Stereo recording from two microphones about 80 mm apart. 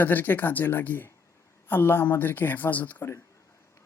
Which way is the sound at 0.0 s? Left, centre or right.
Left.